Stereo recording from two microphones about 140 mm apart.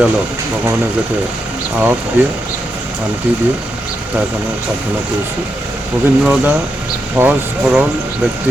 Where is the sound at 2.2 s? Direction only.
15° right (ahead or behind).